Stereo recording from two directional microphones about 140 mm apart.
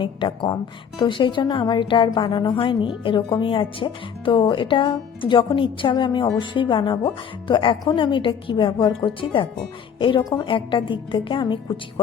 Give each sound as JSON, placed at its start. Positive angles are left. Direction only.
{"t": 0.0, "sound": "speech", "side_deg": 35}